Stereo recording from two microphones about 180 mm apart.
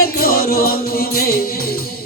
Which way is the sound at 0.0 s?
55° left (ahead or behind).